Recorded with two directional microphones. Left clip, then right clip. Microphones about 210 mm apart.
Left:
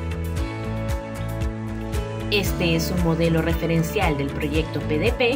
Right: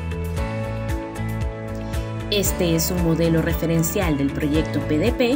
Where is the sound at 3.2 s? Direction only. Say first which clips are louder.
Even; 45° right (ahead or behind).